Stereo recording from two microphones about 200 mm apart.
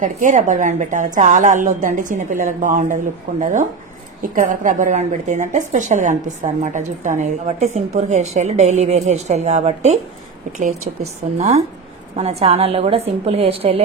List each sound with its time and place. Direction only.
0.0 s a woman's voice: 40° right (ahead or behind)
11.3 s a woman's voice: 30° right (ahead or behind)